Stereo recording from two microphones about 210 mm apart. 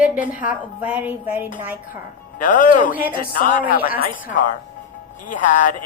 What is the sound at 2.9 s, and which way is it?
Speech, 10° right (ahead or behind).